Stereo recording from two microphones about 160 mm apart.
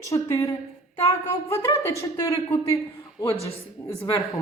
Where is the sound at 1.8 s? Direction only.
20° left (ahead or behind).